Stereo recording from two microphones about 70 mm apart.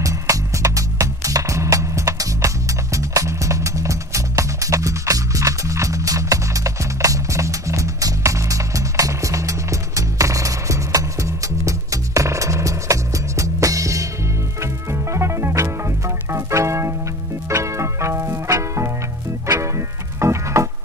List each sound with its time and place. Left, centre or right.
0.0 s music: right
20.2 s music: right